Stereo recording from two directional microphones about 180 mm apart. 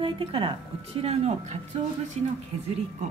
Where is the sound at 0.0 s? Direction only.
30° right (ahead or behind).